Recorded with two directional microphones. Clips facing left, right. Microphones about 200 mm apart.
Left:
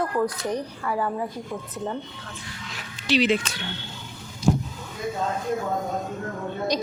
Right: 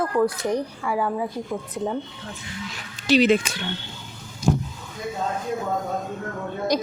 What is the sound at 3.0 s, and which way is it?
Speech, 45° right (ahead or behind).